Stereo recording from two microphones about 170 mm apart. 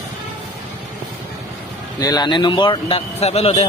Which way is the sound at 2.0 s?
25° left (ahead or behind).